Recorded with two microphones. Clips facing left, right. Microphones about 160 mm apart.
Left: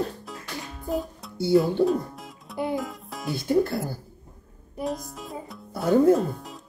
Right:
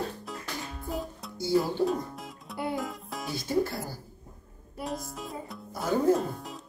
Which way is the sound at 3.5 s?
60° left (ahead or behind).